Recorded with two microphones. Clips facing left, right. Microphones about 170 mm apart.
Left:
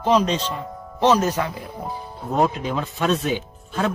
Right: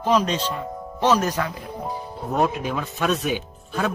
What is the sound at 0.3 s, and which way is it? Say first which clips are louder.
Speech: left 1 dB; 10° right (ahead or behind).